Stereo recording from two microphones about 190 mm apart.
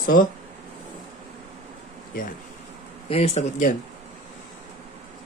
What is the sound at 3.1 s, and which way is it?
Speech, 35° left (ahead or behind).